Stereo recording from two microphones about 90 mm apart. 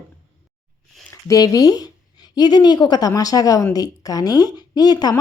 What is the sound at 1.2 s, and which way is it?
Speech, 40° left (ahead or behind).